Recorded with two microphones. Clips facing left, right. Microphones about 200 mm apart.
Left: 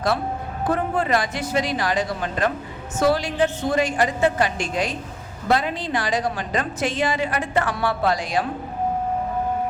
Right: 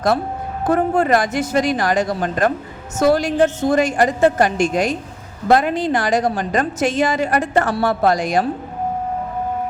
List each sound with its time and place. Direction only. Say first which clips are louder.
0.7 s a woman's voice: right 6 dB; 45° right (ahead or behind)